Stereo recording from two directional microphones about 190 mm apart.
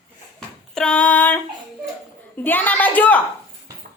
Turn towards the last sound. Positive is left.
turn(degrees=10)  # may be behind; listen again after turning